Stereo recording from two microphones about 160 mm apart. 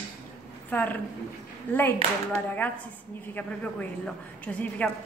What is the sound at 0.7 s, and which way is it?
A woman's voice, 10° left (ahead or behind).